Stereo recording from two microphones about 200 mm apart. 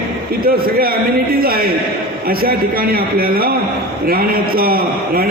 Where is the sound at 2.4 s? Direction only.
50° right (ahead or behind).